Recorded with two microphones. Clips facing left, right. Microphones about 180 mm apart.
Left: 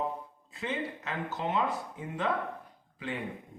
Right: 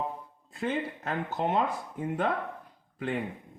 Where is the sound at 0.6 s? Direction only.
50° right (ahead or behind).